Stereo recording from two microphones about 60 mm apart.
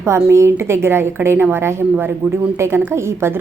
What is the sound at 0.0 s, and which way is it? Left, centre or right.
A woman's voice, right.